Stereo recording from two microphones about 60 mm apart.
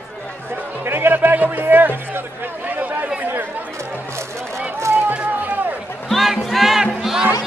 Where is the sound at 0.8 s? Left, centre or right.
Right.